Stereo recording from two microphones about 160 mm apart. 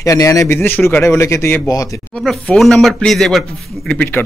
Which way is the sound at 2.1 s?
5° left (ahead or behind).